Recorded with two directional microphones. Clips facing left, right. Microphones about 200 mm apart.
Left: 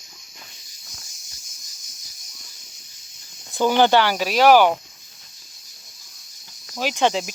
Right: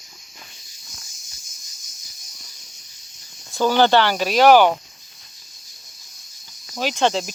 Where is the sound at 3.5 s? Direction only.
15° left (ahead or behind).